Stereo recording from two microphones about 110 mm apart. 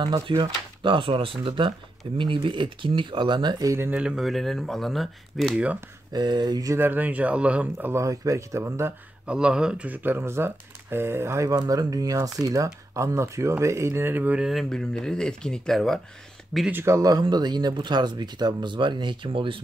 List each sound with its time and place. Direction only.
0.0 s speech: 40° right (ahead or behind)
3.7 s speech: 20° right (ahead or behind)
4.0 s speech: 5° right (ahead or behind)
6.1 s speech: 40° right (ahead or behind)
6.8 s speech: 15° right (ahead or behind)
9.2 s speech: 10° right (ahead or behind)
14.5 s speech: 5° left (ahead or behind)
16.7 s speech: 25° right (ahead or behind)
17.2 s speech: 40° right (ahead or behind)